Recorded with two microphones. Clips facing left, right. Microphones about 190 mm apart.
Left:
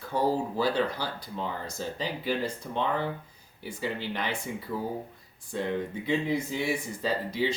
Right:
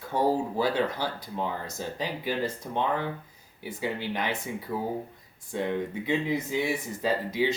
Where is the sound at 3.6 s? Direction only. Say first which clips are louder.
Right 1 dB; 15° right (ahead or behind).